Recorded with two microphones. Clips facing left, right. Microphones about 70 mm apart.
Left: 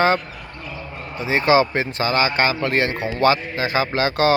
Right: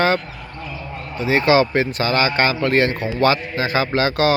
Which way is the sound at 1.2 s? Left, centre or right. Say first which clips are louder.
Right 1 dB; left.